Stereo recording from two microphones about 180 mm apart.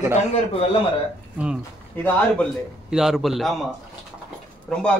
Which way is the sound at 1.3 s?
5° right (ahead or behind).